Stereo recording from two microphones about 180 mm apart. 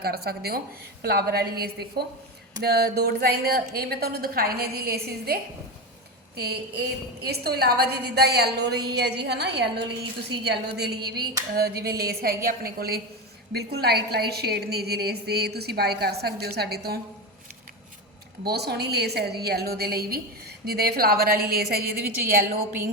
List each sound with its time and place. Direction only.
0.0 s a woman's voice: 60° right (ahead or behind)
18.4 s a woman's voice: 65° right (ahead or behind)